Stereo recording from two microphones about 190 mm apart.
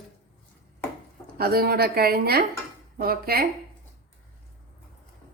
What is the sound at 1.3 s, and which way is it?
A woman's voice, 55° right (ahead or behind).